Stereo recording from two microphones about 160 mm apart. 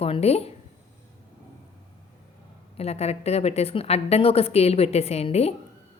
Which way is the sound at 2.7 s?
40° left (ahead or behind).